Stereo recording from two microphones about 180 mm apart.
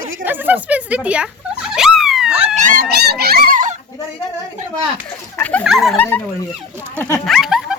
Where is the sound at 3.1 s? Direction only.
60° right (ahead or behind).